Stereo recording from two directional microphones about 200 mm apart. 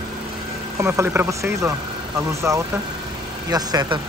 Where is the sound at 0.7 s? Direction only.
15° right (ahead or behind).